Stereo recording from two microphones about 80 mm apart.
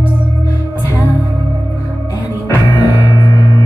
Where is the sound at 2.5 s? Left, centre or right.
Left.